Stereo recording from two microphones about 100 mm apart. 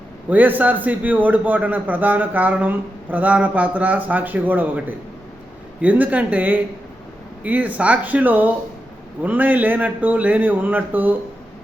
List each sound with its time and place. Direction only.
0.3 s a man's voice: 15° right (ahead or behind)